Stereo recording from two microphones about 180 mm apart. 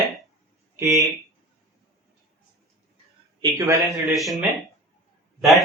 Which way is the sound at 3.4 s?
20° right (ahead or behind).